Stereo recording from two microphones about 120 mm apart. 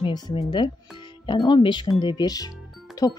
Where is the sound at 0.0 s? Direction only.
45° left (ahead or behind).